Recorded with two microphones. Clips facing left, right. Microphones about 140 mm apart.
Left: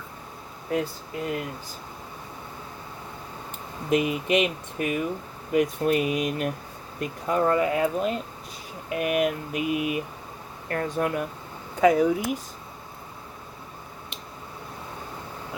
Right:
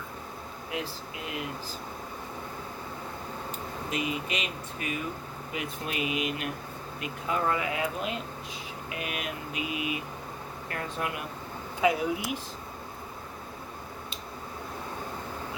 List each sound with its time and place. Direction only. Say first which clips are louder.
3.8 s speech: left 9 dB; 55° left (ahead or behind)
8.9 s speech: left 12 dB; 55° left (ahead or behind)